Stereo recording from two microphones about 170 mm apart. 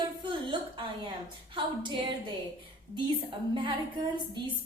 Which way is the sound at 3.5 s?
30° right (ahead or behind).